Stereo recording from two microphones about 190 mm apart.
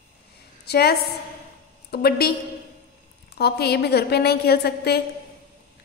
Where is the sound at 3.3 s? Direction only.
55° left (ahead or behind).